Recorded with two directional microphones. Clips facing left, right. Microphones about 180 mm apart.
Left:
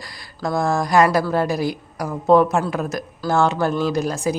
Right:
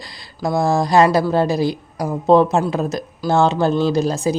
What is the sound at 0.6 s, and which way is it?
Speech, 30° right (ahead or behind).